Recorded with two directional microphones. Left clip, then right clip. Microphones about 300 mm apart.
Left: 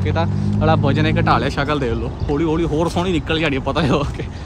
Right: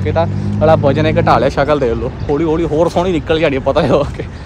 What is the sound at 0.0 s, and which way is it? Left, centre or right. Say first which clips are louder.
Speech: right 6 dB; centre.